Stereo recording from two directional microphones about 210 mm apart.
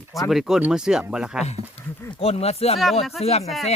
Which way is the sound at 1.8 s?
10° left (ahead or behind).